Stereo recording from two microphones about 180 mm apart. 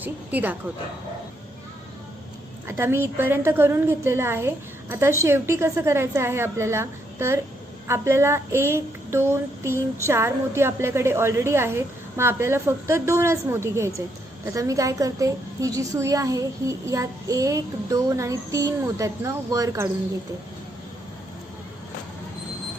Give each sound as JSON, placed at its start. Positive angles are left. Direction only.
{"t": 0.0, "sound": "a woman's voice", "side_deg": -10}
{"t": 2.6, "sound": "a woman's voice", "side_deg": -15}